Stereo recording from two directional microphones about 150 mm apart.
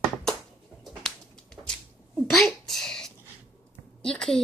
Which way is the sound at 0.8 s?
5° left (ahead or behind).